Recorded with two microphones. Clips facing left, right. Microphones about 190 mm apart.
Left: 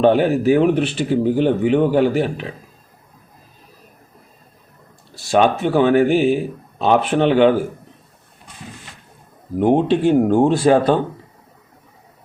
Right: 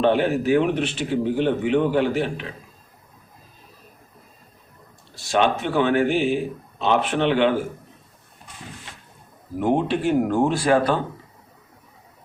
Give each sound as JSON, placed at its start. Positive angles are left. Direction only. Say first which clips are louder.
{"t": 0.0, "sound": "speech", "louder": "left 5 dB", "side_deg": 40}
{"t": 5.4, "sound": "speech", "louder": "left 5 dB", "side_deg": 40}
{"t": 9.6, "sound": "speech", "louder": "left 6 dB", "side_deg": 25}